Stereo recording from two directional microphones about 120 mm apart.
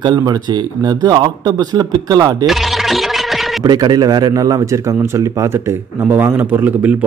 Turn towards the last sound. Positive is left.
turn(degrees=-15)  # may be behind; listen again after turning